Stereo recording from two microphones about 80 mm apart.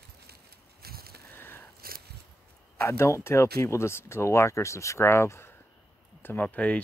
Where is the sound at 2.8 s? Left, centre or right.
Left.